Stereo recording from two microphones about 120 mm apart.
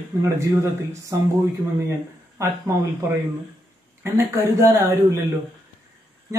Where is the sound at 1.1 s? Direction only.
25° right (ahead or behind).